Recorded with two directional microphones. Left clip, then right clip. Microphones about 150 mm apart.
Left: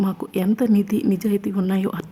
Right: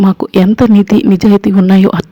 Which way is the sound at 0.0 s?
45° right (ahead or behind).